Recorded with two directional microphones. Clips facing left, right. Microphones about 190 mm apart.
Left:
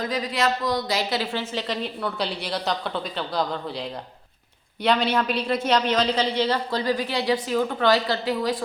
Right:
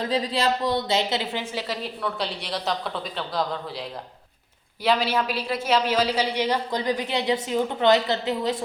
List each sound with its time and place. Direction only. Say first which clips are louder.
0.0 s speech: right 1 dB; 30° right (ahead or behind)